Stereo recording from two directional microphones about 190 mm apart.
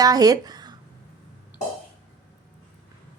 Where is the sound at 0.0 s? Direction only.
20° right (ahead or behind).